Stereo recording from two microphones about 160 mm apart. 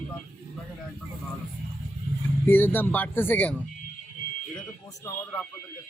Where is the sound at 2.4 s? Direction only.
10° left (ahead or behind).